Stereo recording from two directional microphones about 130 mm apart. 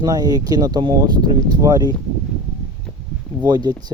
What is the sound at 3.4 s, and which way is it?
Speech, 35° right (ahead or behind).